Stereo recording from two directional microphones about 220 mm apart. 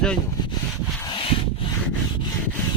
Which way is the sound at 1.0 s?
20° left (ahead or behind).